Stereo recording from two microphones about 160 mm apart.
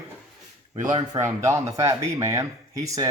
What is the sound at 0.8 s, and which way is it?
Speech, 50° right (ahead or behind).